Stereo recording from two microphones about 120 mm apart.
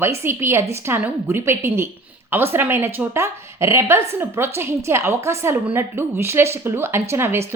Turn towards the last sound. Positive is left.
turn(degrees=-20)  # may be behind; listen again after turning